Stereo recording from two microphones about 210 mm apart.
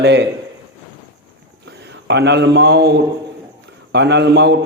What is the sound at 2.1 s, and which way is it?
A man's voice, 55° right (ahead or behind).